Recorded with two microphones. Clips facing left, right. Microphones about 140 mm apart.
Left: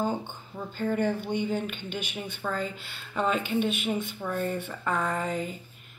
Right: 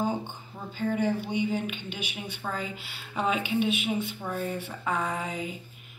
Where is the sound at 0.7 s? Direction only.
5° right (ahead or behind).